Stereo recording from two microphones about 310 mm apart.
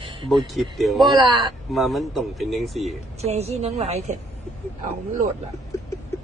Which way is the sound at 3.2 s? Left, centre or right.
Centre.